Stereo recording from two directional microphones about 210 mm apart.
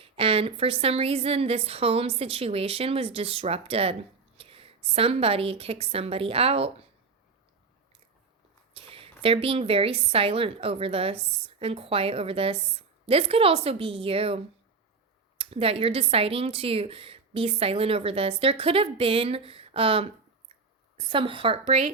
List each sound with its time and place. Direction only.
0.0 s a woman's voice: 25° right (ahead or behind)
8.7 s speech: 25° right (ahead or behind)